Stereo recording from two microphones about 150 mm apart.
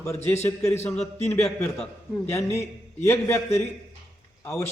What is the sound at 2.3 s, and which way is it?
Speech, 20° left (ahead or behind).